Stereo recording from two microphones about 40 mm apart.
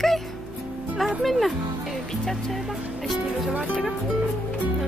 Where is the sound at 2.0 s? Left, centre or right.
Centre.